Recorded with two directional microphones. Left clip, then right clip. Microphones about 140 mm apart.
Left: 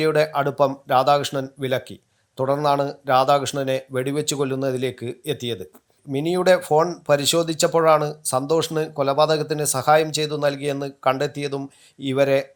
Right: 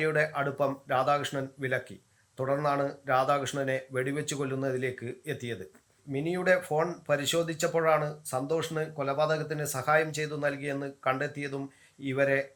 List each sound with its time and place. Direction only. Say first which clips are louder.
0.0 s speech: left 9 dB; 30° left (ahead or behind)